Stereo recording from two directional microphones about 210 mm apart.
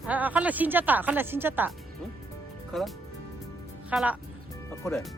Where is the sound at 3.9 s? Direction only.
5° right (ahead or behind).